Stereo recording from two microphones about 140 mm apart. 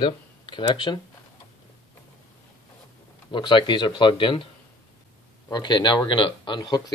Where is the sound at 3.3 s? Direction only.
35° left (ahead or behind).